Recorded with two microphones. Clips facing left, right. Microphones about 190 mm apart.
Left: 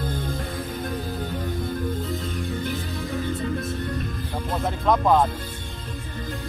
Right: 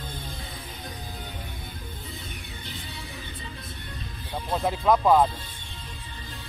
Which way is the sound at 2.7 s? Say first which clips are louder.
Left 12 dB; 55° left (ahead or behind).